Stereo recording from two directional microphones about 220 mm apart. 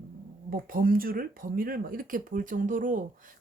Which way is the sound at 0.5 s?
40° right (ahead or behind).